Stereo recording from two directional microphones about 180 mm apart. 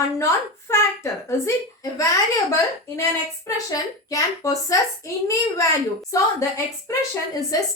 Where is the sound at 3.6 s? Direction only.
20° left (ahead or behind).